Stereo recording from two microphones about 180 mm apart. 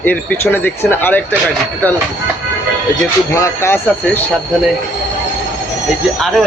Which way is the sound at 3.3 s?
15° left (ahead or behind).